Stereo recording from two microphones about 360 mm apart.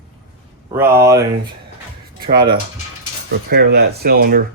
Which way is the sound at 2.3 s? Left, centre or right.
Centre.